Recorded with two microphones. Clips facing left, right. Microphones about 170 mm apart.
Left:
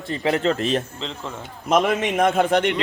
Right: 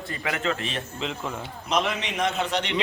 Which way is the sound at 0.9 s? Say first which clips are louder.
Right 1 dB; 10° right (ahead or behind).